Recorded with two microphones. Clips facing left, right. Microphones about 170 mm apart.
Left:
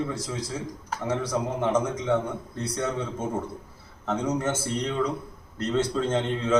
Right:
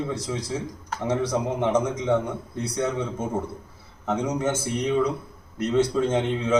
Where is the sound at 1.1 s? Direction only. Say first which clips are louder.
Right 3 dB; 20° right (ahead or behind).